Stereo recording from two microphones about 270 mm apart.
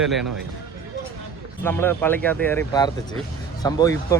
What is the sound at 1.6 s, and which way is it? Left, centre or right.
Speech, centre.